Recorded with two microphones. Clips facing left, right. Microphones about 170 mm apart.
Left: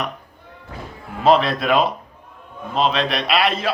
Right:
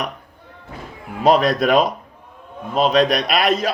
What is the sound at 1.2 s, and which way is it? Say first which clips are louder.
Speech: right 1 dB; 40° right (ahead or behind).